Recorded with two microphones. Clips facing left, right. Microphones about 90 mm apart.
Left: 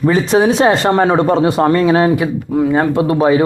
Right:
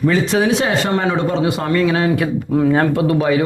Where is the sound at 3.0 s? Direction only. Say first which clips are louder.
Left 3 dB; 30° left (ahead or behind).